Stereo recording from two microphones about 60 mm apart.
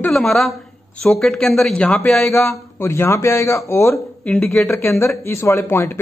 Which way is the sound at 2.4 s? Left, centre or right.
Left.